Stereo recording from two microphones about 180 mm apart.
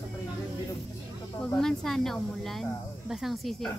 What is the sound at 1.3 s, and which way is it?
Speech, 5° left (ahead or behind).